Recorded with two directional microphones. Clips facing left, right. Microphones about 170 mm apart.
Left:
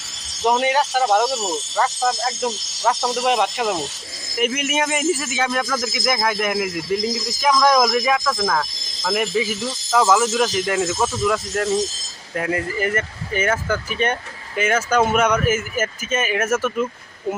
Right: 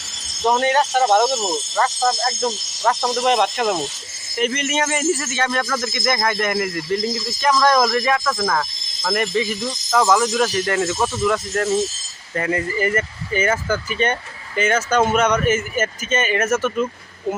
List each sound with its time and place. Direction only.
0.6 s speech: 5° left (ahead or behind)